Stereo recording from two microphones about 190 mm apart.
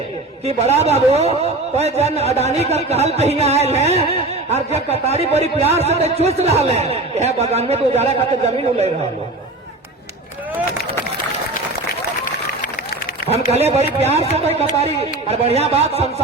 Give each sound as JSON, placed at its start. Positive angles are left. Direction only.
{"t": 0.4, "sound": "speech", "side_deg": -35}
{"t": 13.2, "sound": "speech", "side_deg": -35}